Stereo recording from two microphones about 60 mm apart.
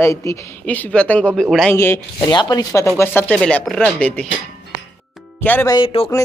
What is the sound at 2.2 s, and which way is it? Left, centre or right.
Speech, left.